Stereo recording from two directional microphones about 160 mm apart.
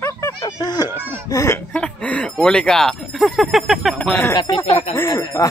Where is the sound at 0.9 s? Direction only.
15° right (ahead or behind).